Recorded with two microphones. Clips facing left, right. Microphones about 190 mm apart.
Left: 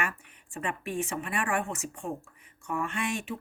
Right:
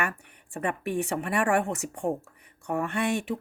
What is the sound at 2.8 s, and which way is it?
Speech, 65° right (ahead or behind).